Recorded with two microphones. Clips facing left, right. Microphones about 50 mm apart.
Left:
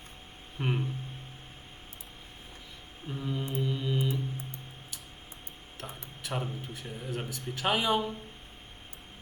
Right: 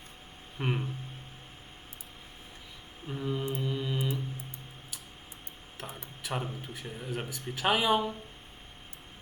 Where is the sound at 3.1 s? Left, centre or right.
Centre.